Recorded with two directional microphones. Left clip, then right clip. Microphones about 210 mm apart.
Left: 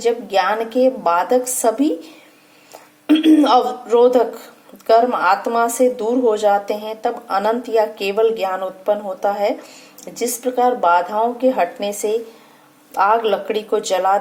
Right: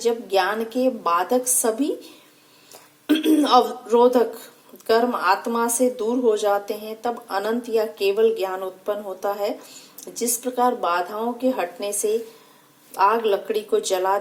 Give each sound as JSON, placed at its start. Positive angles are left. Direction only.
{"t": 0.0, "sound": "speech", "side_deg": -45}
{"t": 3.1, "sound": "speech", "side_deg": -45}
{"t": 12.9, "sound": "speech", "side_deg": -45}